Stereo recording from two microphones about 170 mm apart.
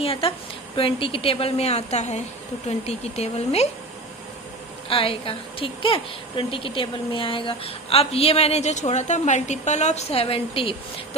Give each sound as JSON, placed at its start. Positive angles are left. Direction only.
{"t": 0.0, "sound": "a woman's voice", "side_deg": 35}
{"t": 4.9, "sound": "a woman's voice", "side_deg": 35}